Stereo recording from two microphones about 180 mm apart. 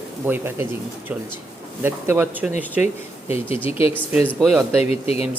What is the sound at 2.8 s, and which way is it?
Speech, 35° left (ahead or behind).